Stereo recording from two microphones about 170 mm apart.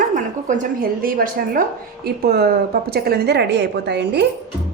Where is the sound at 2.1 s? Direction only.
65° right (ahead or behind); by 4.3 s 80° right.